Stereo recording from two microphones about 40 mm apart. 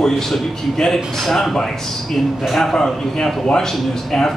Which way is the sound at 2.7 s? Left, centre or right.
Centre.